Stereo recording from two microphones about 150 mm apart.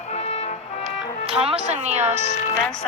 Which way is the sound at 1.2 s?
40° right (ahead or behind).